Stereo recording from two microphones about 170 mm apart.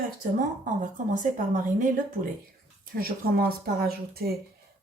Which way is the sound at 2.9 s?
60° right (ahead or behind).